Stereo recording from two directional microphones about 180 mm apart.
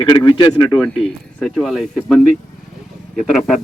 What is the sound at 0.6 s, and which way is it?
Speech, 5° left (ahead or behind).